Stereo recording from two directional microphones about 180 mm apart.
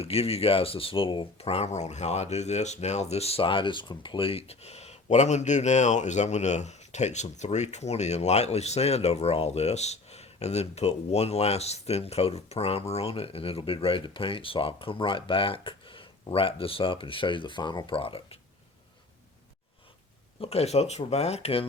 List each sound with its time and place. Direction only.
0.0 s speech: 35° left (ahead or behind)
20.4 s speech: 35° left (ahead or behind)